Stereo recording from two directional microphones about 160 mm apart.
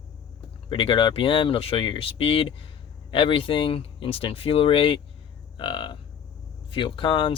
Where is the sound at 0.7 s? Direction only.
30° left (ahead or behind).